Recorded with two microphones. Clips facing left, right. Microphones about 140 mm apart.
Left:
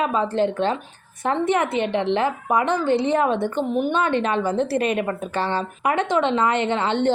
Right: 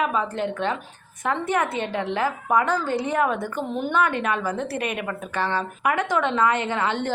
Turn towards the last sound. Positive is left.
turn(degrees=25)  # may be behind; listen again after turning